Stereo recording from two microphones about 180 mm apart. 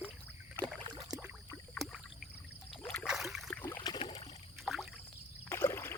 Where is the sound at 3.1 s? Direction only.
Centre (ahead or behind).